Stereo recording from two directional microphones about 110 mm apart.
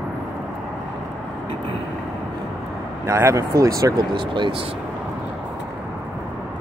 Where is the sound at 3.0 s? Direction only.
25° right (ahead or behind).